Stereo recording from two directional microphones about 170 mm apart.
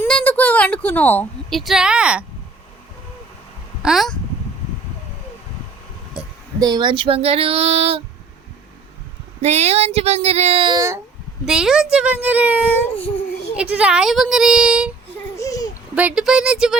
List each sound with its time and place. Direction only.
0.0 s a woman's voice: 10° left (ahead or behind)
3.8 s speech: centre (ahead or behind)
6.2 s a sound: 5° right (ahead or behind)
6.6 s female singing: 25° right (ahead or behind)
9.4 s female singing: 40° right (ahead or behind)
10.8 s speech: 20° right (ahead or behind)
11.4 s speech: centre (ahead or behind)
15.4 s a sound: 20° left (ahead or behind)
16.0 s speech: 5° right (ahead or behind)